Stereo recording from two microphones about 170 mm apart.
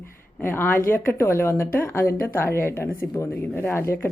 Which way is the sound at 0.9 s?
15° left (ahead or behind).